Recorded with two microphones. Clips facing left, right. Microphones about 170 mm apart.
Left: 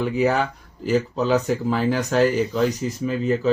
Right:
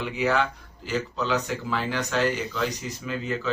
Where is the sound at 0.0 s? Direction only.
40° left (ahead or behind).